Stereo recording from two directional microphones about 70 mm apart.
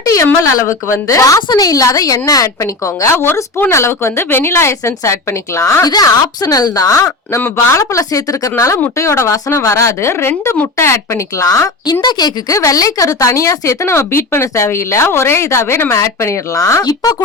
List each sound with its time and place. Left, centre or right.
0.0 s a sound: left
0.5 s speech: left
1.4 s speech: left
5.9 s speech: left
12.0 s a woman's voice: left
12.5 s speech: left